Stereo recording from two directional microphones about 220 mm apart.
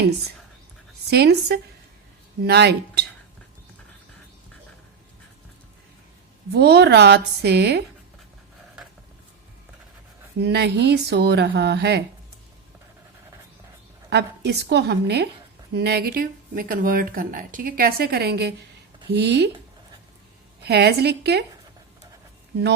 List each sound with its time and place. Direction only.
1.1 s speech: 50° right (ahead or behind)
6.5 s speech: 50° right (ahead or behind)
10.4 s speech: 50° right (ahead or behind)
14.1 s speech: 50° right (ahead or behind)
20.6 s speech: 45° right (ahead or behind)